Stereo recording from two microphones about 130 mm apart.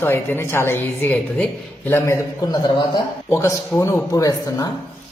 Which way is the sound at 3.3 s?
20° left (ahead or behind).